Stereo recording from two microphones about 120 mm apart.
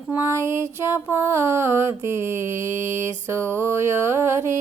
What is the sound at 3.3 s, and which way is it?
Mantra, 20° right (ahead or behind).